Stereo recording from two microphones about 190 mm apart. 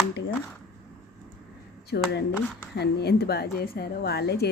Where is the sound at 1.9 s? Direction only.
60° left (ahead or behind).